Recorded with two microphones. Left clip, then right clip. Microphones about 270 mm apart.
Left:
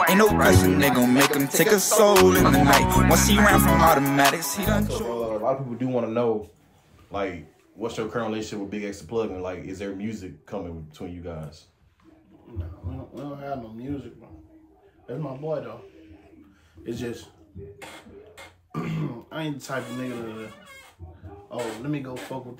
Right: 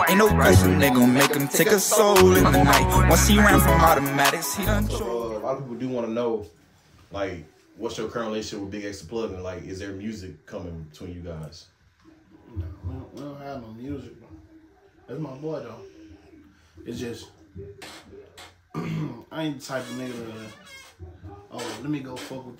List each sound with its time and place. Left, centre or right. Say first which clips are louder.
0.0 s music: even; centre
5.8 s speech: left 2 dB; left
16.8 s music: left 2 dB; centre
18.3 s speech: left 1 dB; centre
21.5 s music: left 1 dB; centre